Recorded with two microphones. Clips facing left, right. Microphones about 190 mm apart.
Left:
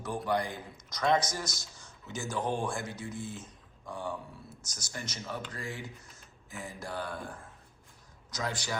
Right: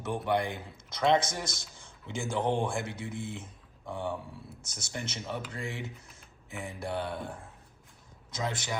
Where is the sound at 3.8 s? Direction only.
20° right (ahead or behind).